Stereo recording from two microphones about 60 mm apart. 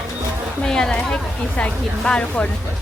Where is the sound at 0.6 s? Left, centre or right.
Centre.